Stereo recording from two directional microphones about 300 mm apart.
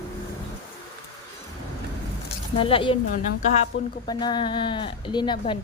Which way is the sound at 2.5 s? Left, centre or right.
Centre.